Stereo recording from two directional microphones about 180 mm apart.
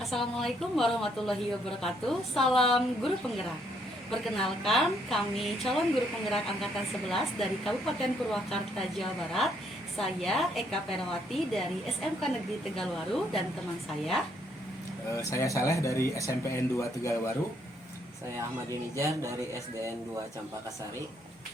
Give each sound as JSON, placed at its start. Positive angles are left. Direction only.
{"t": 0.0, "sound": "a woman's voice", "side_deg": 0}
{"t": 15.1, "sound": "speech", "side_deg": 15}
{"t": 18.9, "sound": "speech", "side_deg": -15}